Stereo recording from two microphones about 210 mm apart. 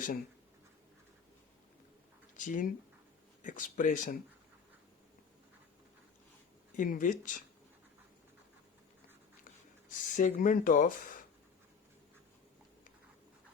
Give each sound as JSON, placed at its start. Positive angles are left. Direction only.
{"t": 2.3, "sound": "speech", "side_deg": 40}
{"t": 6.7, "sound": "speech", "side_deg": 40}
{"t": 9.9, "sound": "speech", "side_deg": 40}